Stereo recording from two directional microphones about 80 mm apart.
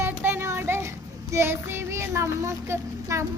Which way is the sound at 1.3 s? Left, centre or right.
Right.